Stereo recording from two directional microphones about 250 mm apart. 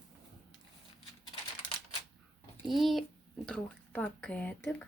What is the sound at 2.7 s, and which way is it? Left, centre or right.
A child's voice, centre.